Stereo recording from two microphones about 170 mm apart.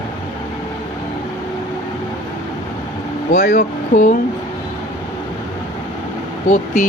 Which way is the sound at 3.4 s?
65° left (ahead or behind).